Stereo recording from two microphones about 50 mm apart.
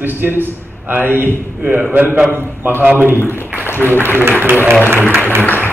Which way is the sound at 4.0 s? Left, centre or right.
Right.